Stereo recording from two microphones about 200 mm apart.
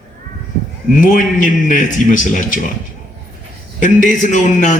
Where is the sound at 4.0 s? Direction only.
40° left (ahead or behind).